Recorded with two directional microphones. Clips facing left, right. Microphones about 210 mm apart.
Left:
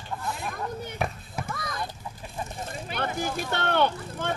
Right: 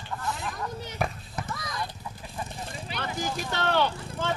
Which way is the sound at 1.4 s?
55° left (ahead or behind).